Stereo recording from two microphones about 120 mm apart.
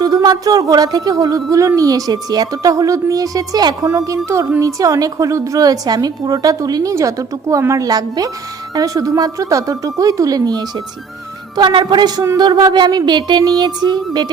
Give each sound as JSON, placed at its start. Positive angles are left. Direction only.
{"t": 0.0, "sound": "a woman's voice", "side_deg": -35}